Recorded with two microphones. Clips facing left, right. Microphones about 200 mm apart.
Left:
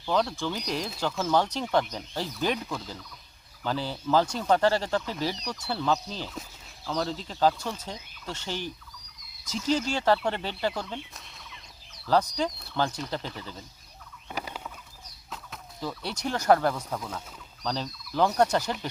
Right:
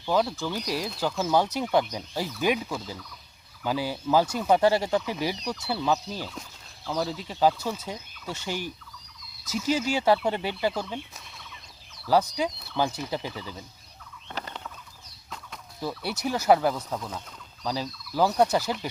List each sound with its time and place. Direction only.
0.0 s speech: 5° right (ahead or behind)
12.0 s speech: 10° right (ahead or behind)
14.3 s rodents: 10° left (ahead or behind)
15.8 s speech: 10° right (ahead or behind)